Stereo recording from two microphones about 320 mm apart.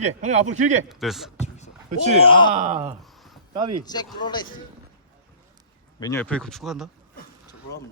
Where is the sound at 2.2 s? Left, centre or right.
Centre.